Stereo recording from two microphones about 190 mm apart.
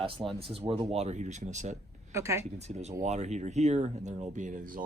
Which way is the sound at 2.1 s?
15° right (ahead or behind).